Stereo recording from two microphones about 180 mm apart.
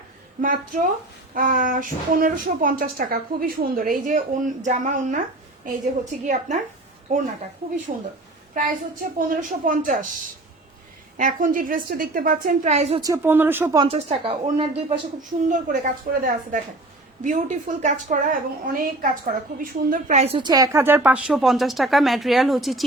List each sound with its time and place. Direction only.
0.4 s a woman's voice: 50° right (ahead or behind)
9.1 s a woman's voice: 50° right (ahead or behind)
11.2 s a woman's voice: 50° right (ahead or behind)
13.0 s speech: 15° right (ahead or behind)
13.7 s speech: 35° right (ahead or behind)
15.2 s a woman's voice: 45° right (ahead or behind); by 22.8 s centre (ahead or behind)